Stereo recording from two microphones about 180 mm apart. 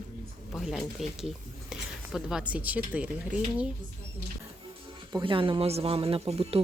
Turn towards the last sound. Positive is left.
turn(degrees=-35)  # may be behind; listen again after turning